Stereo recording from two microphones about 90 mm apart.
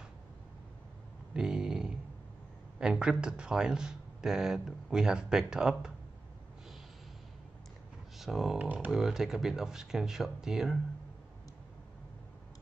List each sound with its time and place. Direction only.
1.3 s a sound: 10° right (ahead or behind)
2.8 s speech: 10° right (ahead or behind)
8.2 s speech: 5° right (ahead or behind)
8.5 s speech: 15° right (ahead or behind)
8.9 s speech: 5° right (ahead or behind)